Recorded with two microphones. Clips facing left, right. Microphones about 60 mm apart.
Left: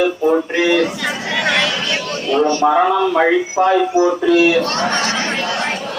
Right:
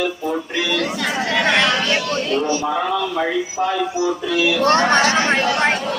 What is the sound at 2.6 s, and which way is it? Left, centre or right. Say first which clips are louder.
Speech: left 7 dB; left.